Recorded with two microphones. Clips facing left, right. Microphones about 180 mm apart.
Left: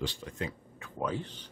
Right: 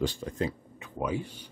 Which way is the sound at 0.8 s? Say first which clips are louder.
Right 2 dB; 15° right (ahead or behind).